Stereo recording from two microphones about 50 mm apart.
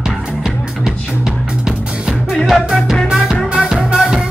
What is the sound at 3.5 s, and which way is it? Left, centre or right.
Music, centre.